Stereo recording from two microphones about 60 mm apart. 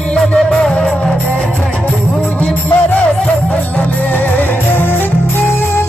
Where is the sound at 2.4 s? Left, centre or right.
Left.